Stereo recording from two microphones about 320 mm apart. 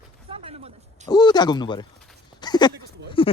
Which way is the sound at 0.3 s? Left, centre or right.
Centre.